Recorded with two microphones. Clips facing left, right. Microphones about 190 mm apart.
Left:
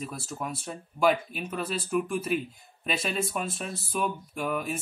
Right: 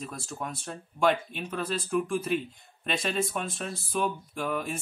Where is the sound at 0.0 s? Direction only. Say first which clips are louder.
Left 2 dB; 5° left (ahead or behind).